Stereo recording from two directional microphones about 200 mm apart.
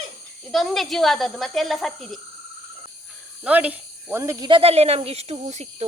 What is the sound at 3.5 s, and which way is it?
Speech, 10° right (ahead or behind).